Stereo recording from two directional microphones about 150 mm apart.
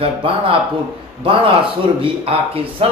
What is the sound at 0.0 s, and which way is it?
Speech, 35° right (ahead or behind).